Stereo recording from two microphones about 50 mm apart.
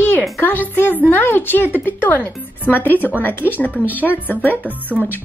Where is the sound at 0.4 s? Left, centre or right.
Left.